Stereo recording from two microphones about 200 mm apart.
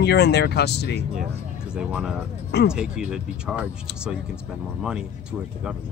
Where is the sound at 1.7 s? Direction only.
5° right (ahead or behind).